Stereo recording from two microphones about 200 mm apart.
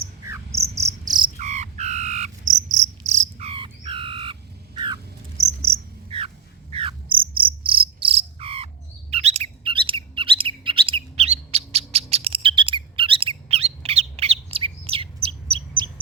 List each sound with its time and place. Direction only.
1.4 s cricket: 35° right (ahead or behind)